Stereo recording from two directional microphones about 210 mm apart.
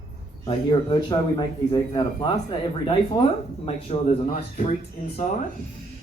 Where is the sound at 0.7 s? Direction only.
20° left (ahead or behind).